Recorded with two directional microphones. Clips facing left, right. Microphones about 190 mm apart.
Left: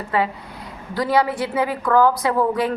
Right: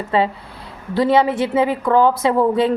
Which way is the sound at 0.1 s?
25° right (ahead or behind).